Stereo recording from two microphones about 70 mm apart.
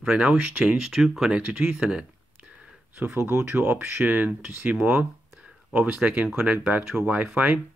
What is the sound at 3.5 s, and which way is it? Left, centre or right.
Speech, right.